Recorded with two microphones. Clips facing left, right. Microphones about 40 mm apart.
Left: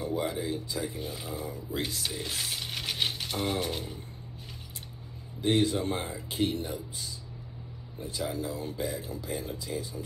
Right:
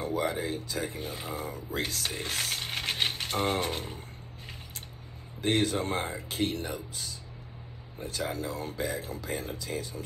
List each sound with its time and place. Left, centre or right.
0.0 s speech: right
2.6 s mechanisms: right
5.4 s speech: right
8.0 s speech: right